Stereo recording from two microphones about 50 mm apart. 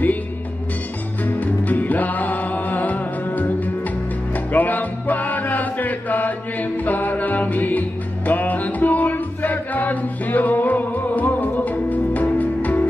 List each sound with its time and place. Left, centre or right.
1.2 s music: left